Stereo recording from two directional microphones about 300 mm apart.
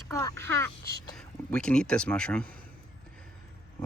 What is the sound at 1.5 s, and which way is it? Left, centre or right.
Speech, centre.